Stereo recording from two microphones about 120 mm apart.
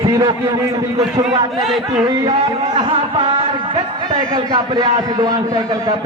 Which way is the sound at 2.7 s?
40° right (ahead or behind).